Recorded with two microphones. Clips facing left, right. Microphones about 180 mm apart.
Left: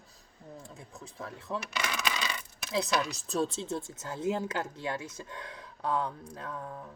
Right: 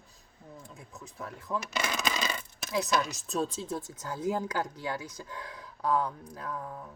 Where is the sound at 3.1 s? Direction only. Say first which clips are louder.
Left 1 dB; 35° left (ahead or behind).